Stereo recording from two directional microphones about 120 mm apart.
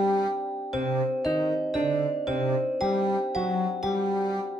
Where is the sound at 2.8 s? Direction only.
5° right (ahead or behind).